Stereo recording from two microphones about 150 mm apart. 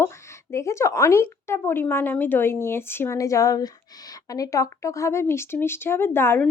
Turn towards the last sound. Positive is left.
turn(degrees=15)  # may be behind; listen again after turning